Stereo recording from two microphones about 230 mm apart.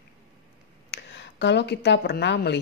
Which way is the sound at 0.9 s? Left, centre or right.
Left.